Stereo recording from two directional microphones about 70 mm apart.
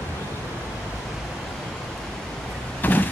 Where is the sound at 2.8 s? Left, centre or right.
Left.